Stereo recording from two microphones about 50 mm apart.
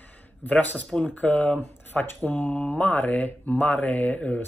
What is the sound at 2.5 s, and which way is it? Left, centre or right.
Mantra, left.